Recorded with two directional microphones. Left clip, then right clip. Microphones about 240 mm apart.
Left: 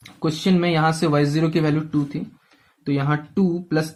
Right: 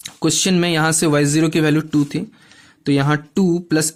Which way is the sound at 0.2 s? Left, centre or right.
Right.